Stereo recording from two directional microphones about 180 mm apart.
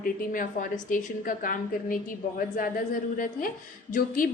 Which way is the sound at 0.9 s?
50° left (ahead or behind).